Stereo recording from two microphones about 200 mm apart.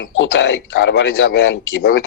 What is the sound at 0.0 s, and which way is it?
Speech, 75° left (ahead or behind).